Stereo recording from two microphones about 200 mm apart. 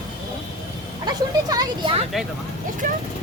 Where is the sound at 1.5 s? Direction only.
20° right (ahead or behind).